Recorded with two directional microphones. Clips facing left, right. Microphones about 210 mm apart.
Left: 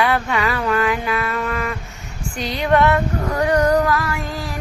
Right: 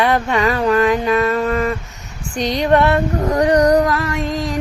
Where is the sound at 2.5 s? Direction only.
35° right (ahead or behind).